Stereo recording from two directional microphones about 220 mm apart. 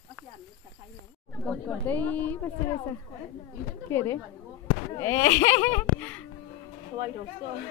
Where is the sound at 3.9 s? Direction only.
10° left (ahead or behind).